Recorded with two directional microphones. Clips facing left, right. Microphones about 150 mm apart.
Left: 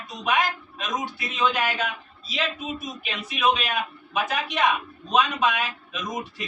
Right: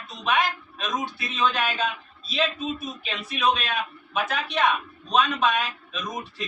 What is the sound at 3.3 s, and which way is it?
Speech, 15° left (ahead or behind).